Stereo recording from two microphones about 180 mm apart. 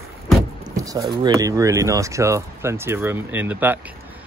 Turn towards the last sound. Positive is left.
turn(degrees=-10)  # may be behind; listen again after turning